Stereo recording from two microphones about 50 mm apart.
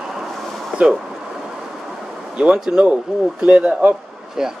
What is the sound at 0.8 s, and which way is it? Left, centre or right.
Speech, right.